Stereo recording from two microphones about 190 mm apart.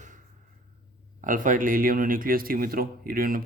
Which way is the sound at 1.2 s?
45° right (ahead or behind).